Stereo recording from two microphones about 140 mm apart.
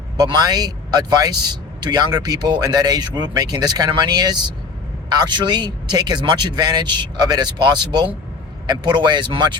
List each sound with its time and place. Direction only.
0.2 s speech: 30° right (ahead or behind)